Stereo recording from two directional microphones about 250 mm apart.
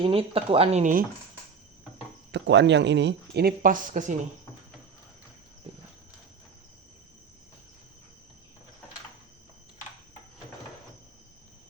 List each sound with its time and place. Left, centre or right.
0.0 s speech: right
2.3 s speech: right